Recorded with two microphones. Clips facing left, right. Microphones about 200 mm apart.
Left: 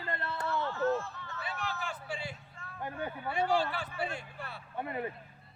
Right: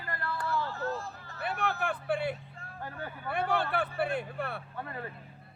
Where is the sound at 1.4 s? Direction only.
60° right (ahead or behind).